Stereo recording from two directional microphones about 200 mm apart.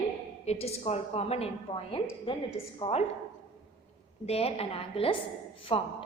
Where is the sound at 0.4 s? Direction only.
30° left (ahead or behind).